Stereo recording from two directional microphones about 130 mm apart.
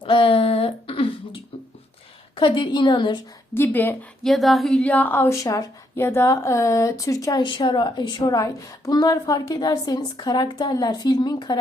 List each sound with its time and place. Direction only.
0.0 s throat clearing: 40° left (ahead or behind)
2.3 s a woman's voice: 40° left (ahead or behind)
3.5 s speech: 15° left (ahead or behind)
4.2 s a woman's voice: centre (ahead or behind); by 7.4 s 25° left (ahead or behind)
7.4 s a woman's voice: 35° left (ahead or behind)